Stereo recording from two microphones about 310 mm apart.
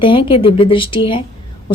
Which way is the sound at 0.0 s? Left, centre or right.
Centre.